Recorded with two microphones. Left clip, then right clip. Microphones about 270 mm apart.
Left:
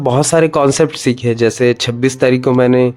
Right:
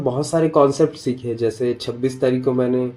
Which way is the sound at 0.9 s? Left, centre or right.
Left.